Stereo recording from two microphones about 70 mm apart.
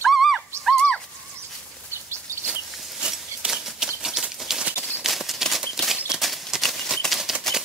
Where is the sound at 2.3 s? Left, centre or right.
Right.